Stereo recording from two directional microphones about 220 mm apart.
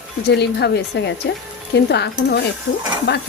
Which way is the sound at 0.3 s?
50° left (ahead or behind).